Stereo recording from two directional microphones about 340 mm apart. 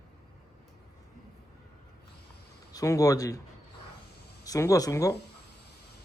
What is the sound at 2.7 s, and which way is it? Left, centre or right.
Speech, centre.